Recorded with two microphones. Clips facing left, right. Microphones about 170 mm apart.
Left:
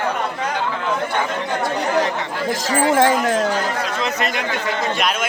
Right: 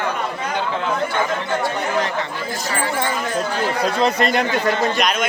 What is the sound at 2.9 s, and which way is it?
Speech, 90° left.